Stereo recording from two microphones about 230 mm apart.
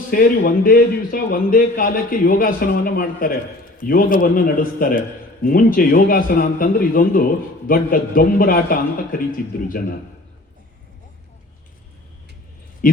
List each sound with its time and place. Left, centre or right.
0.1 s a man's voice: left
12.8 s speech: left